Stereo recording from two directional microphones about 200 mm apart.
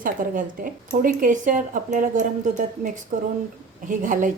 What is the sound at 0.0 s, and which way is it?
A woman's voice, 45° right (ahead or behind).